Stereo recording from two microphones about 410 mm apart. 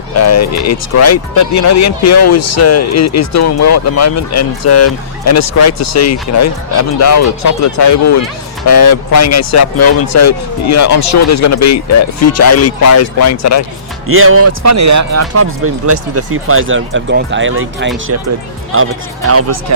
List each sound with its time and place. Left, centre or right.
0.1 s speech: left
14.1 s speech: right
19.3 s speech: right